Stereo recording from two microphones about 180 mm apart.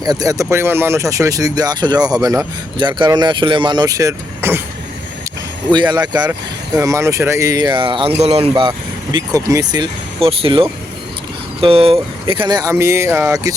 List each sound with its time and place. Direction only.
0.0 s speech: 20° right (ahead or behind)
5.7 s speech: 25° right (ahead or behind)
9.1 s speech: 20° right (ahead or behind)